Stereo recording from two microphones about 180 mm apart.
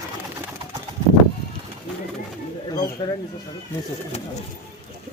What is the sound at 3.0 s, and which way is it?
Speech, 25° left (ahead or behind).